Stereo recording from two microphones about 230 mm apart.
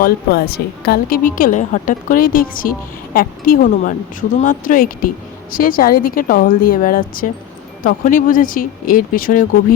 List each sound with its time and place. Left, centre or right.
0.0 s a woman's voice: left